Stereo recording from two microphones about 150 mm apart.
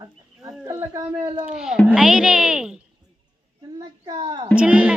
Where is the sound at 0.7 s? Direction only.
20° right (ahead or behind).